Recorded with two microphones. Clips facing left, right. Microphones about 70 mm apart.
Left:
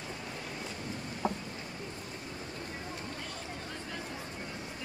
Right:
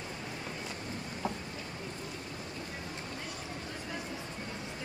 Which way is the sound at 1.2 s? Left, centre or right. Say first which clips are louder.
Left 3 dB; left.